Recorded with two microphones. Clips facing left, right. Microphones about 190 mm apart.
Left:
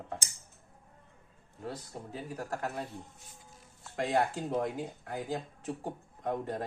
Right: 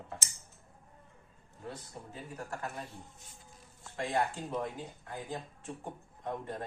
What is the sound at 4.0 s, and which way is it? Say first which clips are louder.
A man's voice: left 3 dB; 45° left (ahead or behind).